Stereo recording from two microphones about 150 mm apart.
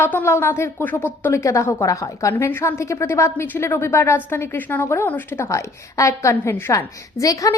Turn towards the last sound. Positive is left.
turn(degrees=20)  # may be behind; listen again after turning